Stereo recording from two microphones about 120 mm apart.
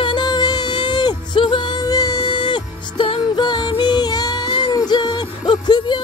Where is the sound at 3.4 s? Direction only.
35° left (ahead or behind).